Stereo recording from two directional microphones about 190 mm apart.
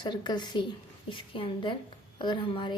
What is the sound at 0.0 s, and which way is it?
Speech, 25° left (ahead or behind).